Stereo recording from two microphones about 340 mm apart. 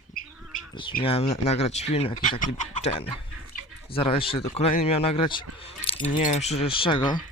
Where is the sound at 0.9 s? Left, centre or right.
Centre.